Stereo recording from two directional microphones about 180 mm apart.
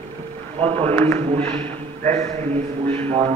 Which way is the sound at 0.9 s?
15° left (ahead or behind).